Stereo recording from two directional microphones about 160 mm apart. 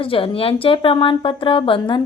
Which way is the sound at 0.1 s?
35° left (ahead or behind).